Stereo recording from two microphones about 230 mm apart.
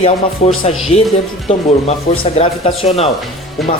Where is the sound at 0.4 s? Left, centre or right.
Left.